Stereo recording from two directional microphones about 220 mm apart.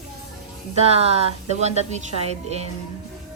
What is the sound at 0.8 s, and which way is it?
Speech, 30° right (ahead or behind).